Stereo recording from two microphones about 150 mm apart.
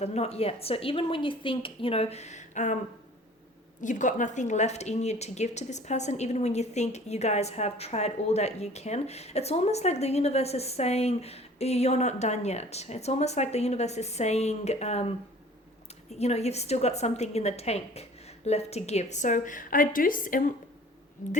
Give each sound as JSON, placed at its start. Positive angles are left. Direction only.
{"t": 0.0, "sound": "a woman's voice", "side_deg": 45}
{"t": 3.8, "sound": "a woman's voice", "side_deg": 55}